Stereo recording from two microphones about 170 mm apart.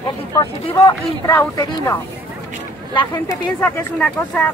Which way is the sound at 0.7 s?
15° left (ahead or behind).